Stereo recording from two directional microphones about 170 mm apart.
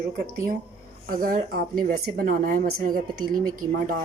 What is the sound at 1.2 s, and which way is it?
A woman's voice, 55° right (ahead or behind).